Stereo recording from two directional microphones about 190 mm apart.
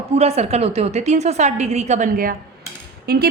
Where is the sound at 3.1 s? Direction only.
55° right (ahead or behind).